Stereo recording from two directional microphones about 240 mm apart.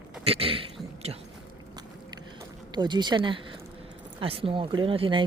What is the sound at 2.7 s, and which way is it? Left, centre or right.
Speech, centre.